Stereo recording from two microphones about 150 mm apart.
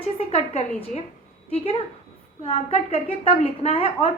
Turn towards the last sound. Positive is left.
turn(degrees=40)  # may be behind; listen again after turning